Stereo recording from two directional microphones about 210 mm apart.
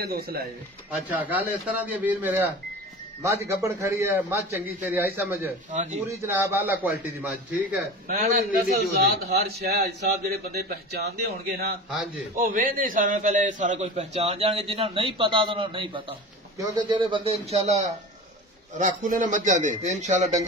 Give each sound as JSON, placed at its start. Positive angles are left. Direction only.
{"t": 0.0, "sound": "a man's voice", "side_deg": -45}
{"t": 0.9, "sound": "a man's voice", "side_deg": -10}
{"t": 5.7, "sound": "a man's voice", "side_deg": -35}
{"t": 6.2, "sound": "a man's voice", "side_deg": -10}
{"t": 8.9, "sound": "a man's voice", "side_deg": -45}